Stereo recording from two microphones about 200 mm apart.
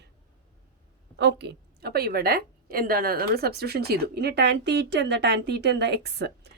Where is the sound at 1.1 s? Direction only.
60° right (ahead or behind).